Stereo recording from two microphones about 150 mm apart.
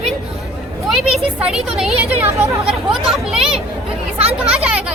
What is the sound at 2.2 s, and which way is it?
Speech, 20° right (ahead or behind).